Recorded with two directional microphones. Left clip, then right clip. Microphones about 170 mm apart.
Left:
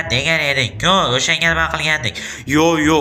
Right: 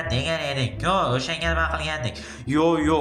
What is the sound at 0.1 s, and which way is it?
Speech, 15° left (ahead or behind).